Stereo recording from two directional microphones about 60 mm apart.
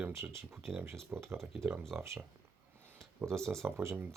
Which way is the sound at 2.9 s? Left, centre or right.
Right.